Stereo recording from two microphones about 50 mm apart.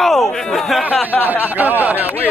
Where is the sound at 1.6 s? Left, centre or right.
Right.